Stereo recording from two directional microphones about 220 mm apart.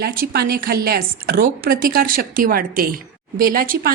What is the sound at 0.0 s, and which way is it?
A woman's voice, 45° right (ahead or behind).